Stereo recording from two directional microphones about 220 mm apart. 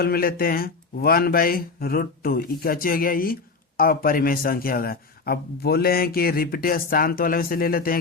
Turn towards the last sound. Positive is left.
turn(degrees=40)  # may be behind; listen again after turning